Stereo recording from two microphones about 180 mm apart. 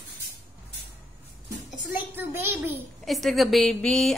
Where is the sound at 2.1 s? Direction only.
10° right (ahead or behind).